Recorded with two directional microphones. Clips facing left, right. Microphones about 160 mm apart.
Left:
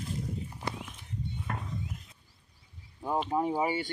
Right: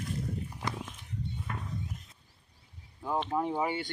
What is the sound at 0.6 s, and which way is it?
Horse, 90° right.